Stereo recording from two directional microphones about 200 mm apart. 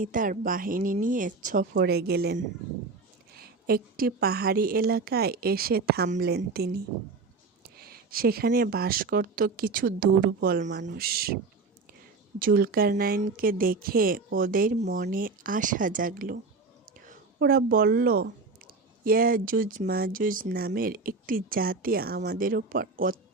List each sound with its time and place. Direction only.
0.0 s speech: 40° right (ahead or behind)
3.7 s speech: 50° right (ahead or behind)
7.8 s speech: 50° right (ahead or behind)
12.4 s speech: 45° right (ahead or behind)